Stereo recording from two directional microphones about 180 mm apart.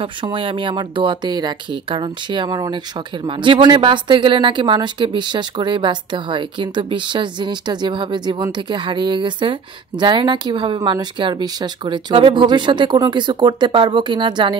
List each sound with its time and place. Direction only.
0.0 s speech: 30° right (ahead or behind)